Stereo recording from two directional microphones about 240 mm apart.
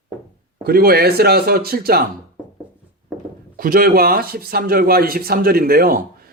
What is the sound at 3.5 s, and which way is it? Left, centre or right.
Speech, right.